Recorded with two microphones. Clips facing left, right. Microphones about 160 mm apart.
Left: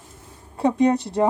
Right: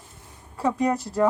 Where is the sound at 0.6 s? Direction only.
20° left (ahead or behind).